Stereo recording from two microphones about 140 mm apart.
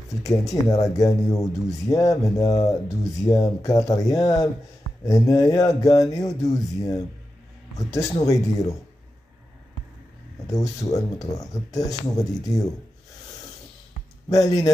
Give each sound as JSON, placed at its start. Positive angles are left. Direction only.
{"t": 0.2, "sound": "speech", "side_deg": 25}
{"t": 10.5, "sound": "speech", "side_deg": 25}
{"t": 14.3, "sound": "speech", "side_deg": 25}